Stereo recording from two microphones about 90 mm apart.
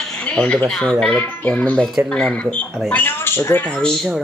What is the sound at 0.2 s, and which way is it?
Speech, 15° left (ahead or behind).